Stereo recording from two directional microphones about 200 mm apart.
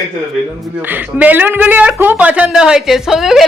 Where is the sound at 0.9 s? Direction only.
10° right (ahead or behind).